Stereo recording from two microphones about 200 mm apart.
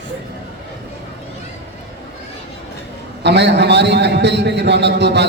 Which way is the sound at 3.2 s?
60° right (ahead or behind).